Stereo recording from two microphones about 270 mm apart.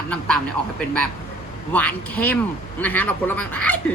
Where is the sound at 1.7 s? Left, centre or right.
Centre.